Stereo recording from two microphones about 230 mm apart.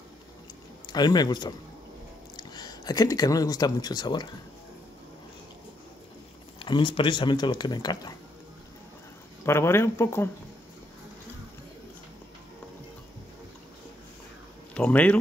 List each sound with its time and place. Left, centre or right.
0.8 s speech: centre
6.6 s speech: left
9.4 s speech: centre
14.7 s speech: centre